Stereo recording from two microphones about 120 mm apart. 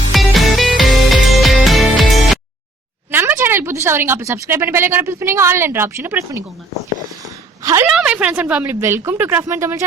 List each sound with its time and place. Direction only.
0.1 s music: centre (ahead or behind)
3.1 s a woman's voice: 15° right (ahead or behind)
7.6 s a sound: 25° right (ahead or behind)
7.9 s a woman's voice: 5° right (ahead or behind); by 9.8 s 25° right (ahead or behind)